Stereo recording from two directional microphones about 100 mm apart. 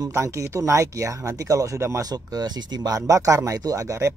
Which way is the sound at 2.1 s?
40° right (ahead or behind).